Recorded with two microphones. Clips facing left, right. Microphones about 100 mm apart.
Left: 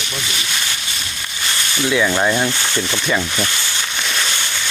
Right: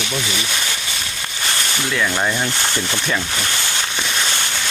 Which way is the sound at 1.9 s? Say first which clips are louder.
Left 4 dB; 10° left (ahead or behind).